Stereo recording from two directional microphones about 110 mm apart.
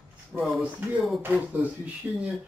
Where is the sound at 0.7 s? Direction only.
15° right (ahead or behind).